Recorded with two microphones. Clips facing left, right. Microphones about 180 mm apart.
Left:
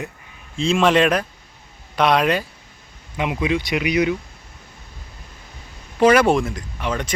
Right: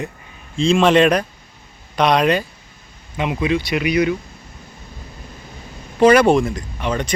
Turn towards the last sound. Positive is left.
turn(degrees=5)  # may be behind; listen again after turning